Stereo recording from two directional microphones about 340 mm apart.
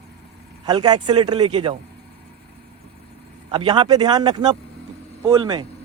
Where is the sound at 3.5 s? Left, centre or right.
Centre.